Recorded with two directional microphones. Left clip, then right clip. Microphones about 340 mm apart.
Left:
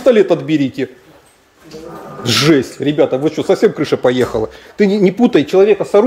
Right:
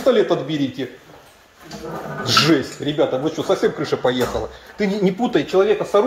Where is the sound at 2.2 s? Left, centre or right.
Left.